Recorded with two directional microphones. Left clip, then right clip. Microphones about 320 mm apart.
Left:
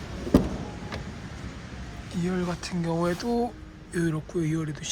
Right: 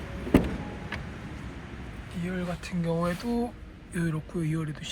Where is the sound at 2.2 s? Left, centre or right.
Centre.